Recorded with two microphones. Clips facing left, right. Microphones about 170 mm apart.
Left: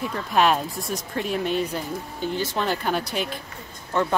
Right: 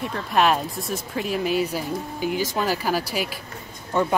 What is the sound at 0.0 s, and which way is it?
Speech, centre (ahead or behind).